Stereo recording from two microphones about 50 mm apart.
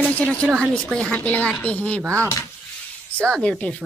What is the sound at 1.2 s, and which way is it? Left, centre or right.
Speech, left.